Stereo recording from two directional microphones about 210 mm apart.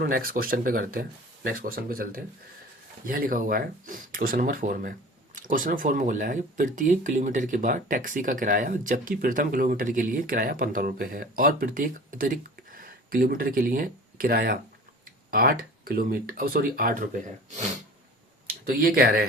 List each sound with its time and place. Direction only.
0.0 s speech: 45° right (ahead or behind)